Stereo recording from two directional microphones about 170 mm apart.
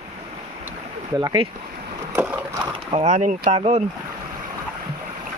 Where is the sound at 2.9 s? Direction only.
40° right (ahead or behind).